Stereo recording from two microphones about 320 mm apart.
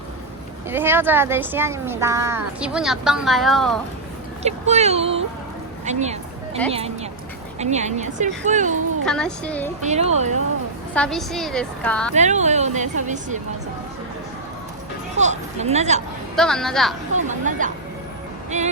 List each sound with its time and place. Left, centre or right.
0.7 s speech: centre
4.4 s speech: right
5.8 s a sound: right
6.7 s speech: centre
9.0 s a woman's voice: centre
9.8 s speech: right
10.9 s a woman's voice: centre
12.1 s speech: right
15.1 s speech: right
16.3 s a woman's voice: centre
17.2 s chatter: right
18.5 s speech: right